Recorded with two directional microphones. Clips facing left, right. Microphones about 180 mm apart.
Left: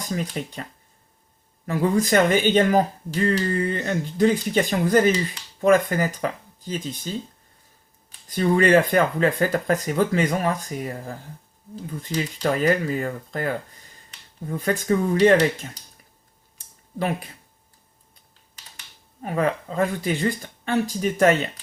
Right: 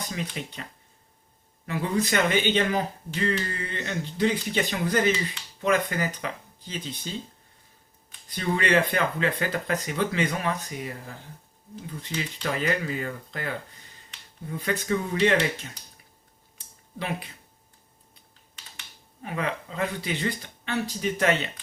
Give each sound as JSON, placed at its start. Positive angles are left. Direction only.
{"t": 0.0, "sound": "speech", "side_deg": 40}
{"t": 1.6, "sound": "speech", "side_deg": 45}
{"t": 8.3, "sound": "speech", "side_deg": 45}
{"t": 17.0, "sound": "speech", "side_deg": 45}
{"t": 19.2, "sound": "speech", "side_deg": 45}